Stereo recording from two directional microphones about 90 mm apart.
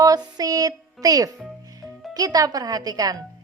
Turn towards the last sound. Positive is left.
turn(degrees=-45)  # may be behind; listen again after turning